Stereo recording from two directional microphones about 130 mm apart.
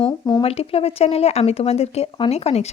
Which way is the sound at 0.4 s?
50° left (ahead or behind).